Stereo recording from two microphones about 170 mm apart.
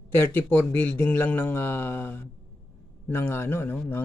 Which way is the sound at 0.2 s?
15° left (ahead or behind).